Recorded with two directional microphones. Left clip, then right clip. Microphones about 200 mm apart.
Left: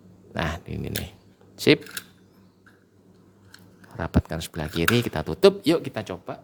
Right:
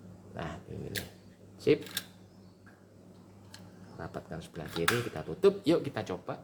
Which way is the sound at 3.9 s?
55° left (ahead or behind).